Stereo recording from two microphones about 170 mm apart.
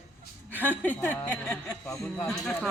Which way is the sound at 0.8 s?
5° left (ahead or behind).